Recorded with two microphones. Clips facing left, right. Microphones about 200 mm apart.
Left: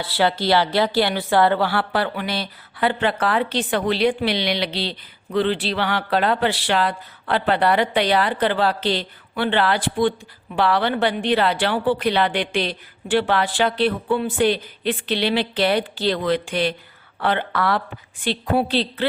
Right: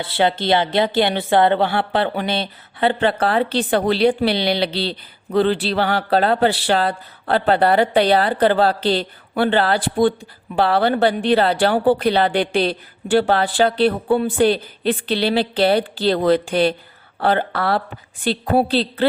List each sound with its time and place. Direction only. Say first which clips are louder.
0.0 s speech: right 2 dB; 20° right (ahead or behind)